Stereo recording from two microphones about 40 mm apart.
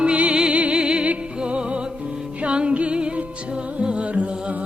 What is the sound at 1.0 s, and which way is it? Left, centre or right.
Music, right.